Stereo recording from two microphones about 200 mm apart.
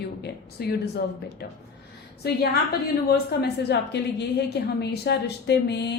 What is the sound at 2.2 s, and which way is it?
A woman's voice, 55° left (ahead or behind).